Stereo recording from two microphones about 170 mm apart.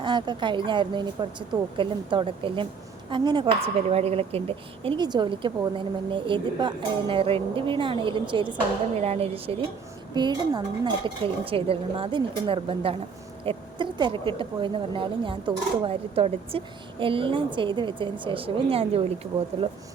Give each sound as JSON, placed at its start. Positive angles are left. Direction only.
{"t": 0.0, "sound": "speech", "side_deg": -25}